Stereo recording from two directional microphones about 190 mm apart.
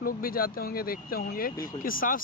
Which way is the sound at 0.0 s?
50° left (ahead or behind).